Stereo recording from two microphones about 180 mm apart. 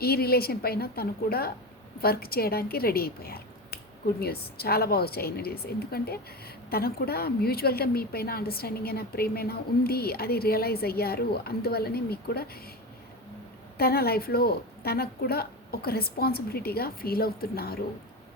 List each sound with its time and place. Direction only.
0.0 s a woman's voice: 60° left (ahead or behind)
13.7 s a woman's voice: 60° left (ahead or behind)